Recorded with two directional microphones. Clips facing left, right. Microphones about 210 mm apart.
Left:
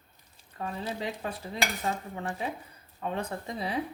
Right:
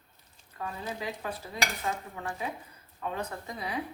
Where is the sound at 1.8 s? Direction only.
25° left (ahead or behind).